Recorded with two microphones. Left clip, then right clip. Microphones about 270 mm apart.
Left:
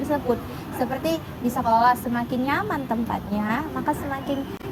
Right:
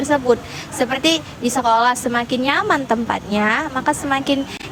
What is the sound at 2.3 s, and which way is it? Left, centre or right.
A woman's voice, right.